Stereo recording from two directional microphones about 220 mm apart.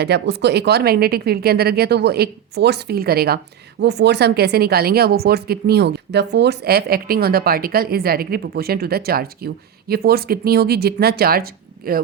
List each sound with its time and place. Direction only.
0.0 s speech: 50° right (ahead or behind)